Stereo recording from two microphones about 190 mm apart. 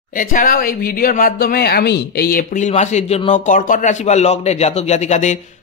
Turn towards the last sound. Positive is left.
turn(degrees=35)  # may be behind; listen again after turning